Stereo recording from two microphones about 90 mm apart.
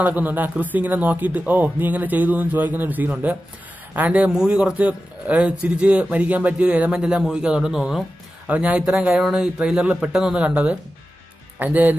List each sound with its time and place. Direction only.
0.0 s a man's voice: 20° right (ahead or behind)